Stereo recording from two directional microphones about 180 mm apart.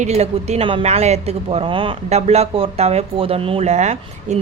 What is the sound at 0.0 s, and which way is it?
A woman's voice, 35° right (ahead or behind).